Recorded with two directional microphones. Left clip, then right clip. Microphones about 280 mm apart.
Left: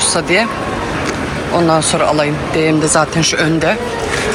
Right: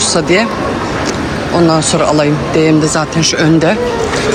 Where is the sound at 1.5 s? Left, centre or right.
Centre.